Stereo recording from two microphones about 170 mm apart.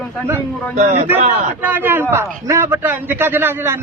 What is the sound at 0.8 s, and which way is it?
Speech, 45° right (ahead or behind).